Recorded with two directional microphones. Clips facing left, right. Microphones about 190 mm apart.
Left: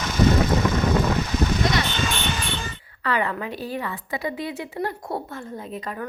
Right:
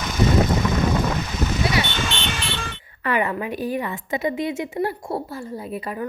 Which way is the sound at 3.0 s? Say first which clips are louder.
Right 2 dB; 15° right (ahead or behind).